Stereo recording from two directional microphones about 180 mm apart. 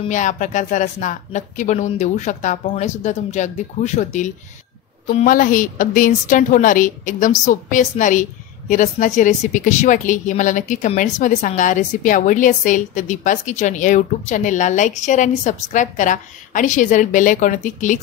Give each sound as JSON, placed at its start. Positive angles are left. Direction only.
{"t": 0.0, "sound": "a woman's voice", "side_deg": 45}